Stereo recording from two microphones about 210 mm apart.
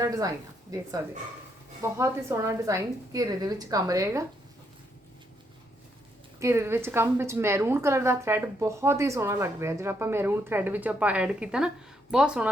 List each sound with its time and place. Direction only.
0.0 s a woman's voice: 15° right (ahead or behind)
1.8 s a woman's voice: 15° right (ahead or behind)
6.4 s a woman's voice: 10° right (ahead or behind)